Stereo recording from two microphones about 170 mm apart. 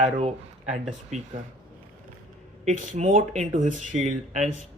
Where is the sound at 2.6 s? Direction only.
45° right (ahead or behind).